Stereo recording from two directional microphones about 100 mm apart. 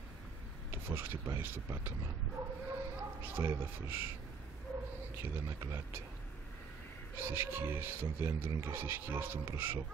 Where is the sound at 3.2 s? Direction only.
20° right (ahead or behind).